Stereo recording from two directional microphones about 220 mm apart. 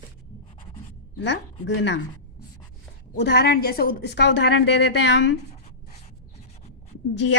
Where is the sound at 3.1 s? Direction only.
50° left (ahead or behind).